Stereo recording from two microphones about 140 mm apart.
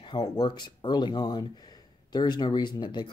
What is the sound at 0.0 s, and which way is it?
Speech, 30° left (ahead or behind).